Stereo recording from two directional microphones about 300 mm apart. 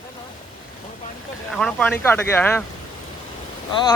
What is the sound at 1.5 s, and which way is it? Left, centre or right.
A man's voice, centre.